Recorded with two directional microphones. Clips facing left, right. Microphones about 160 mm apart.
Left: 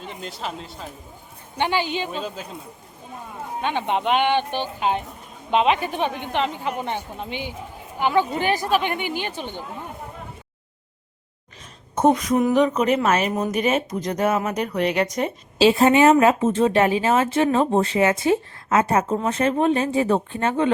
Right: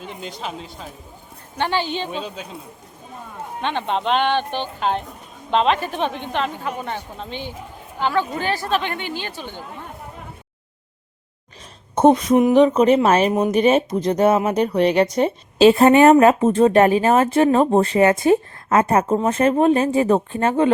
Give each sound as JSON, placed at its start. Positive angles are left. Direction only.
{"t": 0.0, "sound": "speech", "side_deg": 0}
{"t": 1.5, "sound": "speech", "side_deg": 15}
{"t": 3.6, "sound": "speech", "side_deg": 10}
{"t": 11.9, "sound": "speech", "side_deg": -30}
{"t": 15.5, "sound": "speech", "side_deg": -50}